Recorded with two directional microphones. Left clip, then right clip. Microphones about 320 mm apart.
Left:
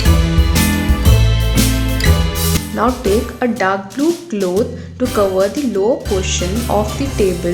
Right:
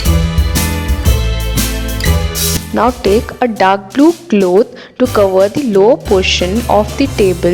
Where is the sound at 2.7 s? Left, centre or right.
Right.